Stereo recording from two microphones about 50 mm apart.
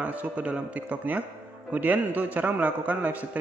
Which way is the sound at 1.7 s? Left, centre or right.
Right.